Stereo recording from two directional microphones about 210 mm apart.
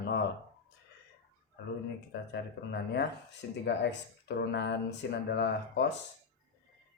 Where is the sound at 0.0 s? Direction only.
50° left (ahead or behind).